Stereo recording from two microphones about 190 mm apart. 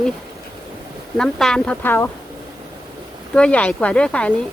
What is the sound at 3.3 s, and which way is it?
Speech, 5° left (ahead or behind).